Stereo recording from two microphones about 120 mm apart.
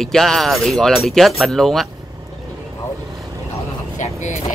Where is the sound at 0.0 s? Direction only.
5° left (ahead or behind).